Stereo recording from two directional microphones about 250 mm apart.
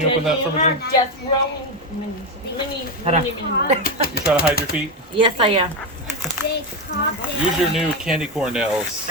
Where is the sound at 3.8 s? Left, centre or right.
Left.